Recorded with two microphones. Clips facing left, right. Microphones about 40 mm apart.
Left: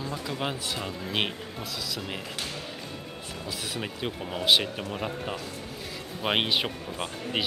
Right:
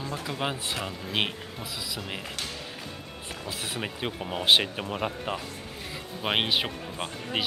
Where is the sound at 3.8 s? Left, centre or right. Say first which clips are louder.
Even; centre.